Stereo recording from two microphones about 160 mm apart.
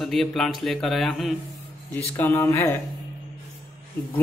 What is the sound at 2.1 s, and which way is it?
Speech, 15° left (ahead or behind).